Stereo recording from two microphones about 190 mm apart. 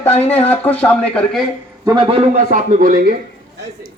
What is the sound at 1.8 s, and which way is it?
Speech, 15° right (ahead or behind).